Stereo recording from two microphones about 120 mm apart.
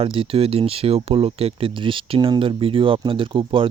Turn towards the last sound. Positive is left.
turn(degrees=-45)  # may be behind; listen again after turning